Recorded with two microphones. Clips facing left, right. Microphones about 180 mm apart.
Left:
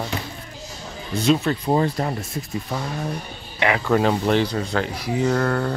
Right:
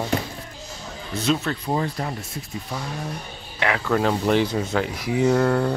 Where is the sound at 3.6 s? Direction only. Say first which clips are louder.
Left 2 dB; 5° left (ahead or behind).